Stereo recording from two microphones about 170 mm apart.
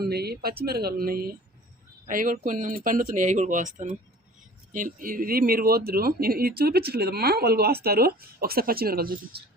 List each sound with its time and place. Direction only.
0.0 s speech: 70° right (ahead or behind)